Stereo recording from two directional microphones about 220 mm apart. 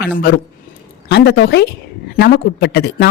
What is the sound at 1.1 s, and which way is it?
Speech, 50° left (ahead or behind).